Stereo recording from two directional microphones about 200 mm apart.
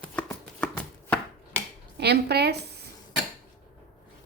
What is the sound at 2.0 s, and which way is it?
Speech, 55° right (ahead or behind).